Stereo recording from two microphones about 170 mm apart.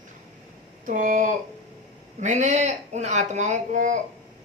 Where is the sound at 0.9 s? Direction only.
50° right (ahead or behind).